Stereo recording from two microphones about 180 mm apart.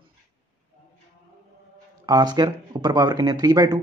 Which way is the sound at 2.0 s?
20° right (ahead or behind).